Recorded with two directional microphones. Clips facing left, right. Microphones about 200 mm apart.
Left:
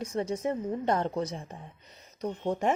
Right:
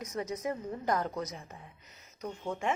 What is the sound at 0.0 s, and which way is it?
A woman's voice, 30° left (ahead or behind).